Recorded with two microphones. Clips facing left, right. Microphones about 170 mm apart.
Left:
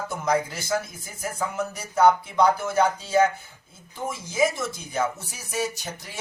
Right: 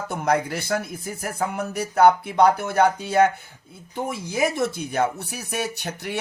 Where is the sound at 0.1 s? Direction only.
60° right (ahead or behind).